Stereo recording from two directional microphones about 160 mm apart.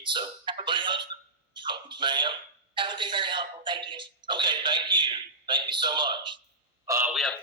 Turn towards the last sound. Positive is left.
turn(degrees=0)  # may be behind; listen again after turning